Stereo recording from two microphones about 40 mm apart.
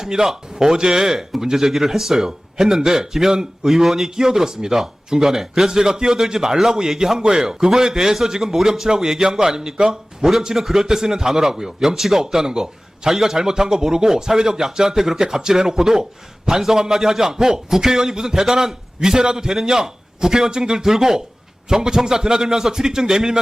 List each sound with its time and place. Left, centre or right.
0.0 s a man's voice: centre